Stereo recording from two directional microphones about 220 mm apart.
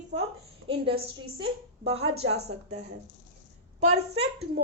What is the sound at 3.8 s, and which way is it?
Speech, 30° right (ahead or behind).